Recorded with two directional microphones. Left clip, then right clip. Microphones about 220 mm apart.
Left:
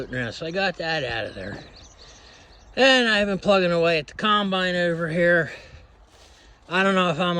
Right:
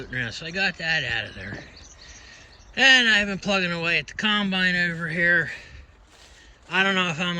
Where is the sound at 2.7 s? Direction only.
20° left (ahead or behind).